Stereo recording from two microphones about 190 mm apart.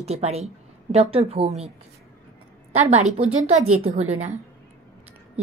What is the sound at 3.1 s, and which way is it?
Speech, 40° right (ahead or behind).